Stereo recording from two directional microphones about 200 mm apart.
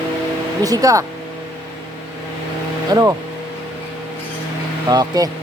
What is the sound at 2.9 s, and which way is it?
Speech, 20° right (ahead or behind).